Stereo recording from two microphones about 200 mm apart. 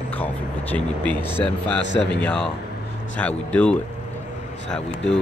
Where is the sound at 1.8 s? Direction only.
60° left (ahead or behind).